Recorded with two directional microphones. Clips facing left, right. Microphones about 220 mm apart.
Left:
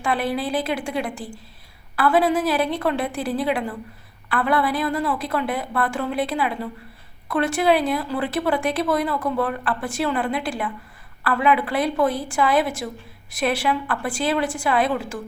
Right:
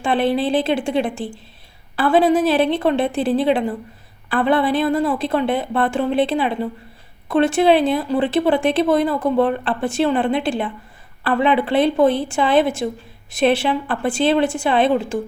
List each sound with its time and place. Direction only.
0.0 s speech: 25° right (ahead or behind)